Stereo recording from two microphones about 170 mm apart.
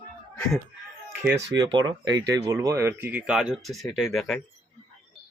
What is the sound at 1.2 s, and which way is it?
Speech, 15° right (ahead or behind).